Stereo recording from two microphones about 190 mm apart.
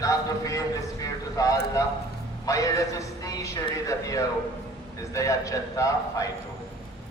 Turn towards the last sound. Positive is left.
turn(degrees=20)  # may be behind; listen again after turning